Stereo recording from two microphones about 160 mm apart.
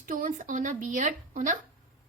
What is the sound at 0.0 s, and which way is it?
A woman's voice, 60° right (ahead or behind).